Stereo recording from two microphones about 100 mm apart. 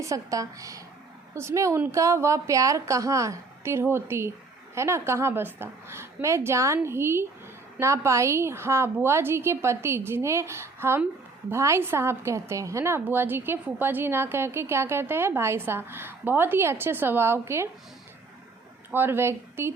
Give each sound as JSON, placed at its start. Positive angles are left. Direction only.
{"t": 0.0, "sound": "a woman's voice", "side_deg": -35}
{"t": 18.9, "sound": "a woman's voice", "side_deg": -20}